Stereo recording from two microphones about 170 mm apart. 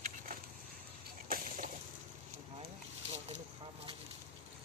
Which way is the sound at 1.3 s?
50° right (ahead or behind).